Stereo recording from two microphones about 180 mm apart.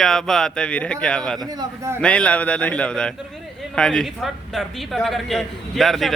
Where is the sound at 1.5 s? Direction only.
20° right (ahead or behind).